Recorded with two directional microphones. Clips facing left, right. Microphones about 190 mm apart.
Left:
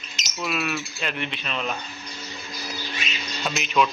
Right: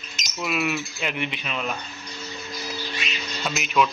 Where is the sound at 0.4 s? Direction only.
15° right (ahead or behind).